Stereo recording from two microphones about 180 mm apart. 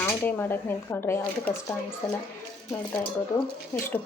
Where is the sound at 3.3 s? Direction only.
15° left (ahead or behind).